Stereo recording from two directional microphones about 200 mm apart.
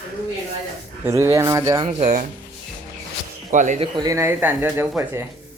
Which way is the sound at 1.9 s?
35° right (ahead or behind).